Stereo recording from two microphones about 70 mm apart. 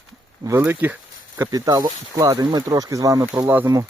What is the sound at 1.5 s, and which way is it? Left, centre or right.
Speech, right.